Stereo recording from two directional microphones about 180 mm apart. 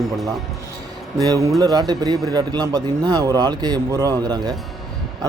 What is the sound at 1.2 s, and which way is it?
A man's voice, 20° right (ahead or behind).